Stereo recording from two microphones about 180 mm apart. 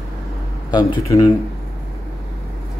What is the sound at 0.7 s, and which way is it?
Speech, 20° left (ahead or behind).